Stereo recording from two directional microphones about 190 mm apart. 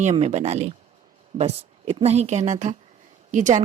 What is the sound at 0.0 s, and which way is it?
Speech, 35° right (ahead or behind).